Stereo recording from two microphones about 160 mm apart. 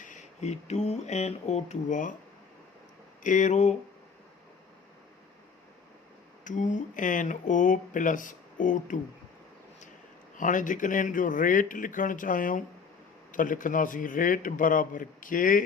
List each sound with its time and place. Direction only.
0.0 s speech: 50° left (ahead or behind)
3.2 s speech: 50° left (ahead or behind)
6.4 s speech: 50° left (ahead or behind)
10.3 s speech: 55° left (ahead or behind)